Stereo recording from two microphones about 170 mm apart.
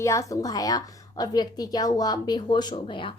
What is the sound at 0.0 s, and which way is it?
A woman's voice, 20° left (ahead or behind).